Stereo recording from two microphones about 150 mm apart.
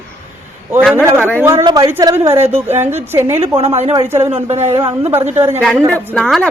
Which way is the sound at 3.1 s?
15° right (ahead or behind).